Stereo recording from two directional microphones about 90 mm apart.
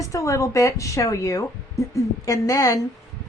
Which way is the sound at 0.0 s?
35° left (ahead or behind).